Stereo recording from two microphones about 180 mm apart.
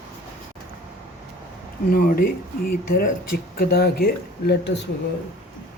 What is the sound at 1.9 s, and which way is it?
Speech, 55° left (ahead or behind).